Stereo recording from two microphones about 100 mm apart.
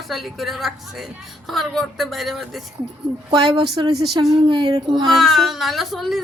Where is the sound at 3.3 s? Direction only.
45° right (ahead or behind).